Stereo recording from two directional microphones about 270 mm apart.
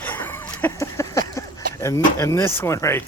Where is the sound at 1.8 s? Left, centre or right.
Centre.